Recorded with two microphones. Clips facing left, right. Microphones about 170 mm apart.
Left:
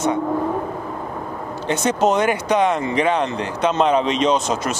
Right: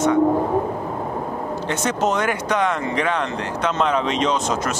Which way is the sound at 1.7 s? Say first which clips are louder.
Left 4 dB; 20° left (ahead or behind).